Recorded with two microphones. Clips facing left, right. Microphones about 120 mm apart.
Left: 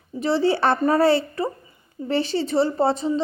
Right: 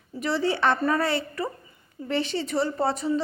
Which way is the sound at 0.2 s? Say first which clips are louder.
Left 5 dB; 30° left (ahead or behind).